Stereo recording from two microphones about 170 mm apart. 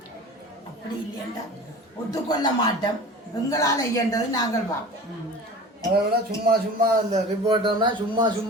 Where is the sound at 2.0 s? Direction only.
25° left (ahead or behind).